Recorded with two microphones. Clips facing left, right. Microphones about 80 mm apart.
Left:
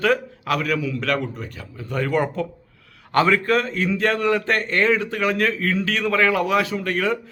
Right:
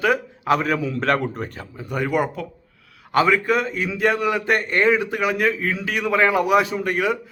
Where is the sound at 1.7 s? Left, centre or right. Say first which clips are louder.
Even; centre.